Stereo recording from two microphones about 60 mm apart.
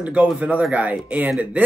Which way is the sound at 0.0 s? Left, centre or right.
Right.